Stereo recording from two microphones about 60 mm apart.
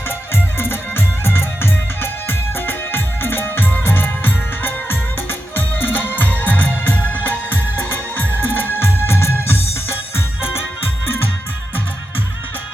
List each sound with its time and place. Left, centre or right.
0.3 s music: left